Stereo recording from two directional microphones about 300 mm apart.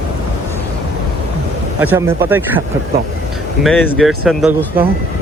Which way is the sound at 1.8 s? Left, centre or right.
Centre.